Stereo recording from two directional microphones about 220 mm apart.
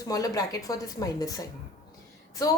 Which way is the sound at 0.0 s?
15° left (ahead or behind).